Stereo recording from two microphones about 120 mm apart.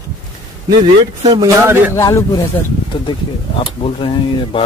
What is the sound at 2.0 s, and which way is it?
Speech, 30° left (ahead or behind).